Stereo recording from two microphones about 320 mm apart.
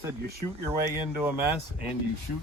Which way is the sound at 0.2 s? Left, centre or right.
Right.